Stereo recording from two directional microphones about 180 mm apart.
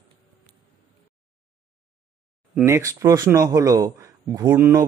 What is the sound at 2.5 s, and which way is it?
Speech, 15° right (ahead or behind).